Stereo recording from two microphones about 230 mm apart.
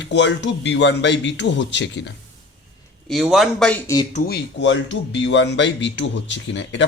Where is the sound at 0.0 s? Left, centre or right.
Left.